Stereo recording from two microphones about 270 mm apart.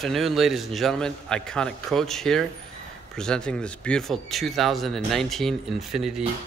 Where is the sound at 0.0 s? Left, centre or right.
Centre.